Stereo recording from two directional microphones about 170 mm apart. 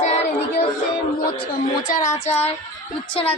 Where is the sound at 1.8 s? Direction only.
50° left (ahead or behind).